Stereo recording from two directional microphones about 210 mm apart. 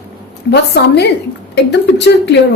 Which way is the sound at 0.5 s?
50° left (ahead or behind).